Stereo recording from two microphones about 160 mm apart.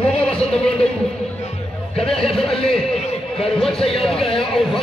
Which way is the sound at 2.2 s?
5° left (ahead or behind).